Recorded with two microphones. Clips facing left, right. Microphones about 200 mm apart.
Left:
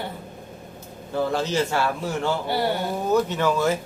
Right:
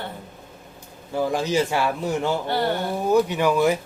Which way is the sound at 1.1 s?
15° right (ahead or behind).